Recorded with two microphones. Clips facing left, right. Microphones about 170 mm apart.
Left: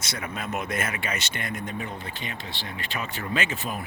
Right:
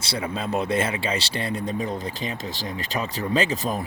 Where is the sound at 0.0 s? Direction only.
30° right (ahead or behind).